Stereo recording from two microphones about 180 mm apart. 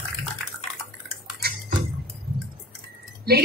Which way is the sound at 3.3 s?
60° right (ahead or behind).